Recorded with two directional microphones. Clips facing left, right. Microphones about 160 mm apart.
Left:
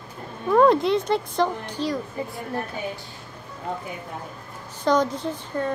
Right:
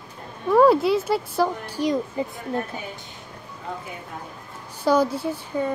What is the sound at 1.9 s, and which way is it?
Speech, 20° right (ahead or behind).